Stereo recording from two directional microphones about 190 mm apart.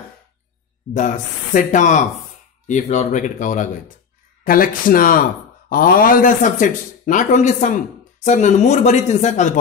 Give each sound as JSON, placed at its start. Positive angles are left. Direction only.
{"t": 0.9, "sound": "speech", "side_deg": 45}